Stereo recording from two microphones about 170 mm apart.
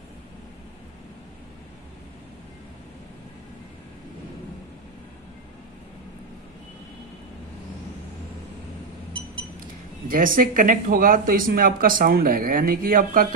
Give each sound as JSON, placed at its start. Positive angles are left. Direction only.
{"t": 9.6, "sound": "speech", "side_deg": -55}